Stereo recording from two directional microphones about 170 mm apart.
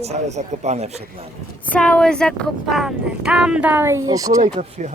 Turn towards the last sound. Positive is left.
turn(degrees=-45)  # may be behind; listen again after turning